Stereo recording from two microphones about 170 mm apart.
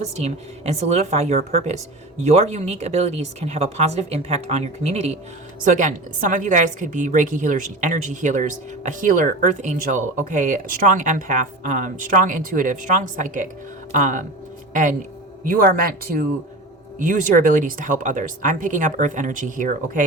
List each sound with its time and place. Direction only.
0.2 s a woman's voice: 40° right (ahead or behind)
5.6 s a woman's voice: 50° right (ahead or behind)